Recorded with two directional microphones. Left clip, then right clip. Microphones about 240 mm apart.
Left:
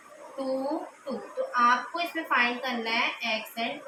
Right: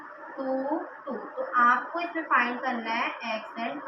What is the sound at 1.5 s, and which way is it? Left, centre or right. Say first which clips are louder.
A woman's voice: right 1 dB; left.